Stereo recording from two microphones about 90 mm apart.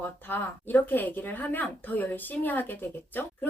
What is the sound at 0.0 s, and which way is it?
Speech, 20° left (ahead or behind).